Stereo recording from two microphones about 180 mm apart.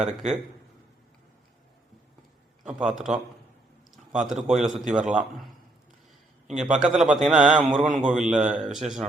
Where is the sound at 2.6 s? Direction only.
5° right (ahead or behind).